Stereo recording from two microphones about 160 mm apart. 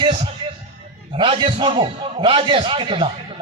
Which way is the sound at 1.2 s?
30° right (ahead or behind).